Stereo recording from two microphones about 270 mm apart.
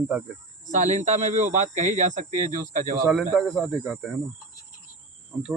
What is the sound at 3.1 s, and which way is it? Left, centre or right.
Speech, centre.